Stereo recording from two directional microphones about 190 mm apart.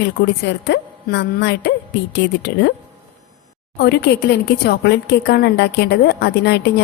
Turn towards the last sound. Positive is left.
turn(degrees=60)  # may be behind; listen again after turning